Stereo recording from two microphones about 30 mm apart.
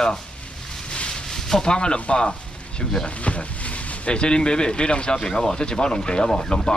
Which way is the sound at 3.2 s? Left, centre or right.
Left.